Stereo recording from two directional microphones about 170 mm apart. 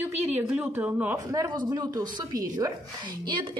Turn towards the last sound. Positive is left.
turn(degrees=-25)  # may be behind; listen again after turning